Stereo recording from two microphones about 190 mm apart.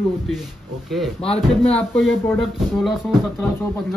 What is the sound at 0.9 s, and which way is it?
Speech, centre (ahead or behind).